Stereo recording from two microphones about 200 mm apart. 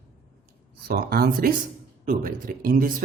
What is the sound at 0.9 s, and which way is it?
Speech, 50° right (ahead or behind).